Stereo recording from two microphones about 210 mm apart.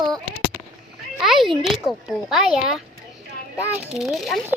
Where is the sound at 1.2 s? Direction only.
Centre (ahead or behind).